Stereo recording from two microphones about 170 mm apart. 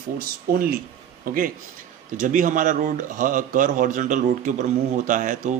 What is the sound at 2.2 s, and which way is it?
Speech, 50° right (ahead or behind).